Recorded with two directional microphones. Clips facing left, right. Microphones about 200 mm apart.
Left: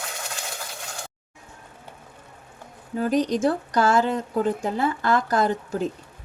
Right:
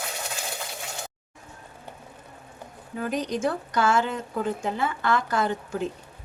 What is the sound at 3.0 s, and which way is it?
Speech, 35° left (ahead or behind).